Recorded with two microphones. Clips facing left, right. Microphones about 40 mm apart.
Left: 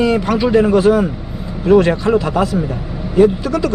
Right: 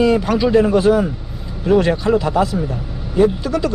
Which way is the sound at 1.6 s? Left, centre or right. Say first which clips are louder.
Left 3 dB; left.